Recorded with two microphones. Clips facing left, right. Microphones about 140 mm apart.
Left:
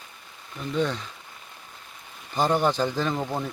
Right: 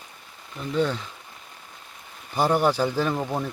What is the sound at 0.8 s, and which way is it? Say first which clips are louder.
Speech: right 2 dB; 5° right (ahead or behind).